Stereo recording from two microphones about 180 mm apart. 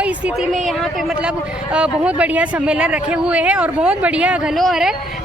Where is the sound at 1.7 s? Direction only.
5° right (ahead or behind).